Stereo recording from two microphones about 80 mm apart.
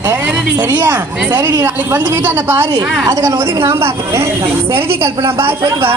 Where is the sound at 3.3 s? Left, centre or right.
Right.